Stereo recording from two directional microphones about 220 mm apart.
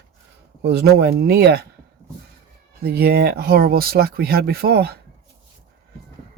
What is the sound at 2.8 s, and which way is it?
Speech, 45° right (ahead or behind).